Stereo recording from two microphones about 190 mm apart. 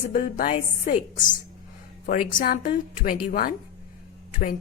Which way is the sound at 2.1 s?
45° left (ahead or behind).